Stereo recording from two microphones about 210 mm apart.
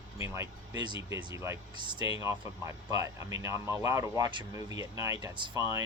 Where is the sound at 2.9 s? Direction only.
15° right (ahead or behind).